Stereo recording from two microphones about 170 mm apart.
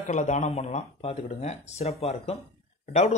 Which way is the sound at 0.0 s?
45° left (ahead or behind).